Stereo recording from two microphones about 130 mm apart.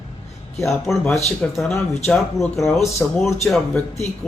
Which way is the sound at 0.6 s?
Centre (ahead or behind).